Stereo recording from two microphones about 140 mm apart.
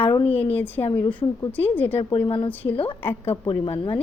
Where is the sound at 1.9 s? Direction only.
35° left (ahead or behind).